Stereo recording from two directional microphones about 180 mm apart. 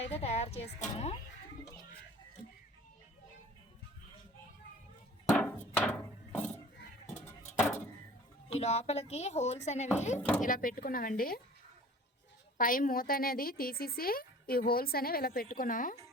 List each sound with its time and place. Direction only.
0.1 s speech: 35° left (ahead or behind)
5.3 s a sound: 10° left (ahead or behind)
8.4 s speech: 35° left (ahead or behind)
10.2 s speech: 5° left (ahead or behind)
10.4 s speech: 50° left (ahead or behind)
12.5 s a woman's voice: 50° left (ahead or behind)